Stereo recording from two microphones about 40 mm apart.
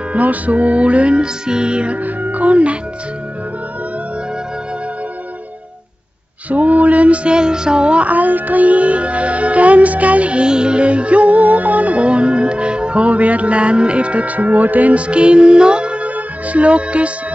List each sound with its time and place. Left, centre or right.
0.1 s music: right
2.0 s speech: right
6.5 s music: right
7.3 s music: centre
8.1 s music: right